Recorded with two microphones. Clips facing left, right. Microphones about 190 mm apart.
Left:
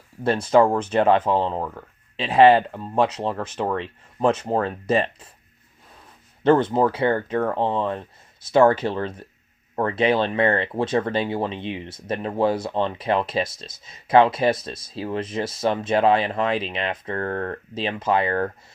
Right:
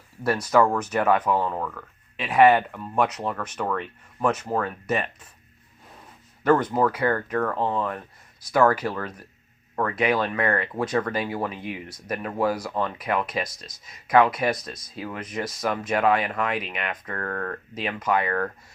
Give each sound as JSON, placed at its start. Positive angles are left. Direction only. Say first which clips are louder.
{"t": 0.2, "sound": "speech", "louder": "left 3 dB", "side_deg": 30}
{"t": 6.4, "sound": "speech", "louder": "left 3 dB", "side_deg": 25}